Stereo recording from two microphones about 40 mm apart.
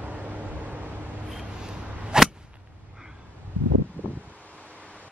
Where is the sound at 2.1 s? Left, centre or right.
Centre.